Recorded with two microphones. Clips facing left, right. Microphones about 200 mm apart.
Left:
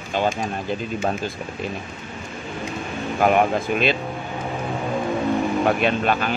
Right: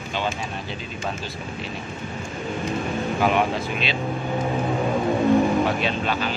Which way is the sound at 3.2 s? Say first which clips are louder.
Left 5 dB; 50° left (ahead or behind).